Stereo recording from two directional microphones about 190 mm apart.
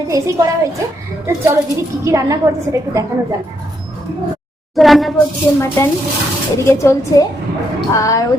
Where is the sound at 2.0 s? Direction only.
15° right (ahead or behind).